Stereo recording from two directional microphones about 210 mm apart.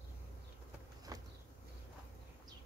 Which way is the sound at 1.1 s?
15° right (ahead or behind).